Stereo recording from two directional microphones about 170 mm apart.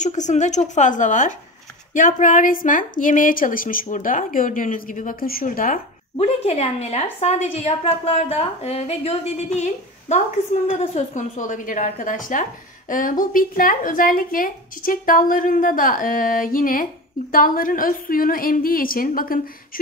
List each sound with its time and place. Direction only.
0.0 s speech: 45° left (ahead or behind)
6.1 s a woman's voice: 40° left (ahead or behind); by 19.4 s 55° left (ahead or behind)